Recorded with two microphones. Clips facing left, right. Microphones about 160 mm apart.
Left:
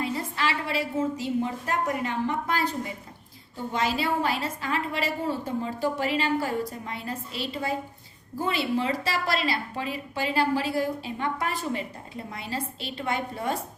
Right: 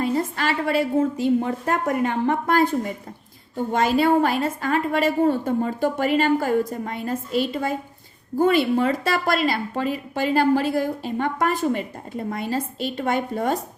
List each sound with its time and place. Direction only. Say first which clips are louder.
0.0 s a woman's voice: right 6 dB; 45° right (ahead or behind)